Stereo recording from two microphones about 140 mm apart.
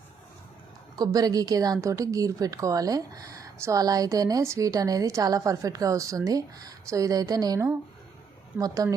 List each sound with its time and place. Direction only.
0.9 s a woman's voice: 25° right (ahead or behind)